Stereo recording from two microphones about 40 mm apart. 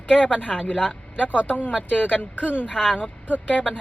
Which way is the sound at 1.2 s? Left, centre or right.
Left.